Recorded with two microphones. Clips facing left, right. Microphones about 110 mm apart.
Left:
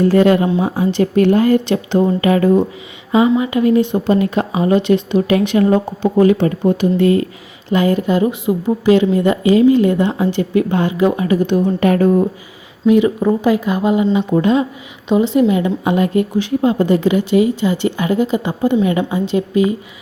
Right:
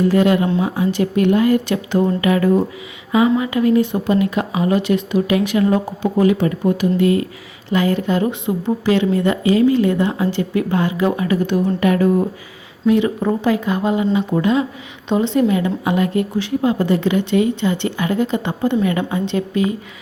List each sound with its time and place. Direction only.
0.1 s a woman's voice: 35° left (ahead or behind)
7.7 s a woman's voice: 20° left (ahead or behind)
12.8 s a woman's voice: 15° left (ahead or behind)